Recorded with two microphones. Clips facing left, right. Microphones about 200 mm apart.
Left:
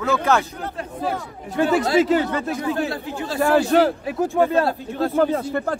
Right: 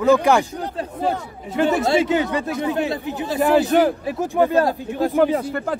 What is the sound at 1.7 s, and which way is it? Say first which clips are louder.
A man's voice: left 1 dB; 20° right (ahead or behind).